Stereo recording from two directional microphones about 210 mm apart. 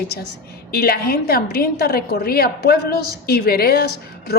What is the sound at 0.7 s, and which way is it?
A woman's voice, 50° left (ahead or behind).